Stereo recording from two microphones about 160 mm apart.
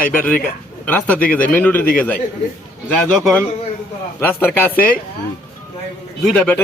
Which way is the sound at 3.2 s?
5° left (ahead or behind).